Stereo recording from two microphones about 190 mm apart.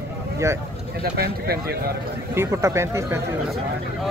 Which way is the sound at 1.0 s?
55° right (ahead or behind).